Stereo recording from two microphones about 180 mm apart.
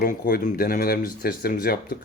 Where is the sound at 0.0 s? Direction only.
55° left (ahead or behind).